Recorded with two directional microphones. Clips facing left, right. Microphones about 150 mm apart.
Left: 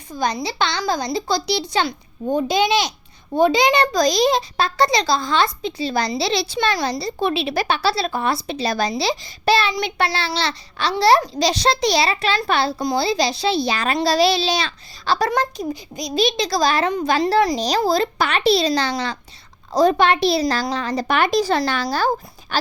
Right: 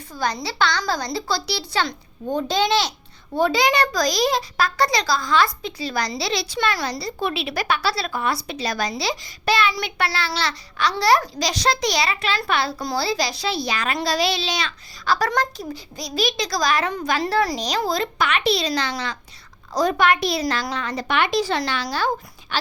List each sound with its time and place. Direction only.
0.1 s a child's voice: 20° left (ahead or behind)
15.3 s a child's voice: 15° left (ahead or behind); by 22.5 s 45° left (ahead or behind)